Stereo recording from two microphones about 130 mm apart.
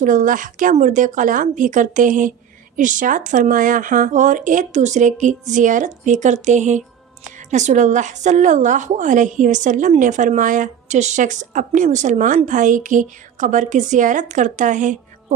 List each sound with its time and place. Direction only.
0.0 s a woman's voice: 90° right; by 12.4 s 70° right (ahead or behind)
12.5 s a woman's voice: 85° right; by 14.9 s 70° right (ahead or behind)